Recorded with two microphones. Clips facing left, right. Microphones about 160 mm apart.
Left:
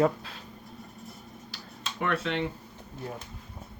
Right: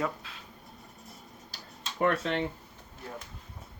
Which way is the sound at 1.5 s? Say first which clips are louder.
Left 3 dB; 45° right (ahead or behind).